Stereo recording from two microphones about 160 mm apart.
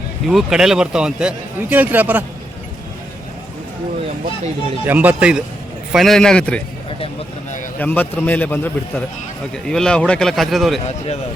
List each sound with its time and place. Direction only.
0.3 s speech: centre (ahead or behind)
4.9 s a man's voice: 10° right (ahead or behind); by 6.6 s 5° left (ahead or behind)
7.8 s a man's voice: 10° left (ahead or behind)
10.8 s a man's voice: 40° left (ahead or behind)